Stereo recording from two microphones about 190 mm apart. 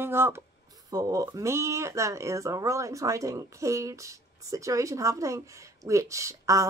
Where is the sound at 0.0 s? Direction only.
10° right (ahead or behind).